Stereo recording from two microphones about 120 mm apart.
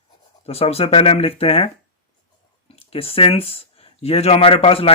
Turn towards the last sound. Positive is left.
turn(degrees=50)  # may be behind; listen again after turning